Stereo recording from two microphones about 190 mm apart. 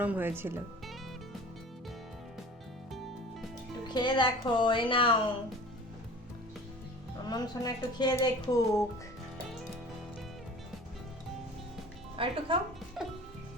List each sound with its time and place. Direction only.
0.0 s speech: 10° right (ahead or behind)
3.8 s speech: 25° left (ahead or behind)
7.3 s speech: 20° left (ahead or behind)
12.1 s speech: 30° right (ahead or behind)
13.0 s music: centre (ahead or behind)